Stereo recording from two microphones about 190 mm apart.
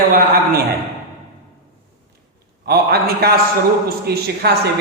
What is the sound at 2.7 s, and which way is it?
A man's voice, 55° right (ahead or behind).